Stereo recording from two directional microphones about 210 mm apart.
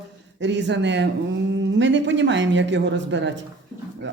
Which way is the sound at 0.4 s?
55° right (ahead or behind).